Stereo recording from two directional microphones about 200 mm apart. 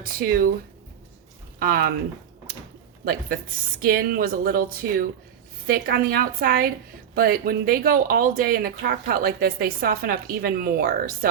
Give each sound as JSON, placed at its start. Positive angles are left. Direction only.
{"t": 0.0, "sound": "speech", "side_deg": -45}
{"t": 1.5, "sound": "speech", "side_deg": -45}
{"t": 3.0, "sound": "speech", "side_deg": -50}